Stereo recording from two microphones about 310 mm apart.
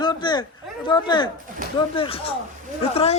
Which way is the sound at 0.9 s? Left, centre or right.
Centre.